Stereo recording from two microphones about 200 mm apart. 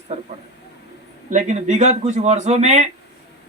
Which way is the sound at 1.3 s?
35° right (ahead or behind).